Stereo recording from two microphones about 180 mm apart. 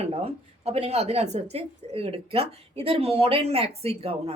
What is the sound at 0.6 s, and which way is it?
Speech, 35° right (ahead or behind).